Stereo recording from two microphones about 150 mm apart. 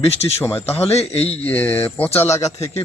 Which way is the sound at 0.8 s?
40° left (ahead or behind).